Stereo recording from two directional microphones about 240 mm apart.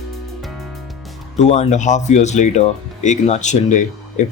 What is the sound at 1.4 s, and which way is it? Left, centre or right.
Speech, left.